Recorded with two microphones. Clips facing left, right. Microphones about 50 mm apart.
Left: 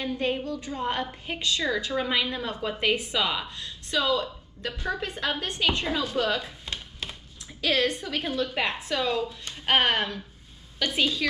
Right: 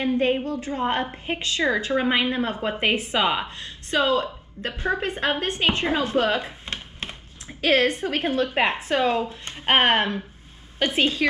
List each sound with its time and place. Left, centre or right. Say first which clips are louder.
0.0 s a woman's voice: right 6 dB; right